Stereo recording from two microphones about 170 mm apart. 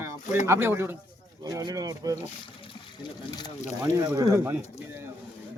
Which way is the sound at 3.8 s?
15° right (ahead or behind).